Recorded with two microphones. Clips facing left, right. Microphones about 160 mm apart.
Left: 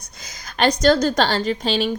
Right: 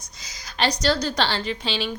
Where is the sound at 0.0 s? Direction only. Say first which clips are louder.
Left 3 dB; 55° left (ahead or behind).